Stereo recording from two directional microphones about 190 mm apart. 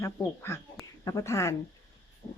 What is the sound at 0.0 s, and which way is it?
Speech, 15° left (ahead or behind).